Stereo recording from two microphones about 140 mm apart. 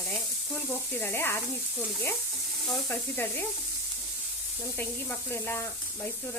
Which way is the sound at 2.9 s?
15° left (ahead or behind).